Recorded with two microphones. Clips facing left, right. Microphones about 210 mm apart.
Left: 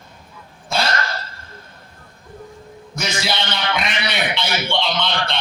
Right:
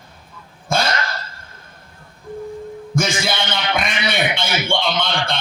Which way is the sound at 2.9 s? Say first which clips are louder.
Right 5 dB; 50° right (ahead or behind).